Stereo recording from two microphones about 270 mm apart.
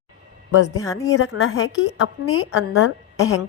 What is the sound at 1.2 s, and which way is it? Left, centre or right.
A woman's voice, left.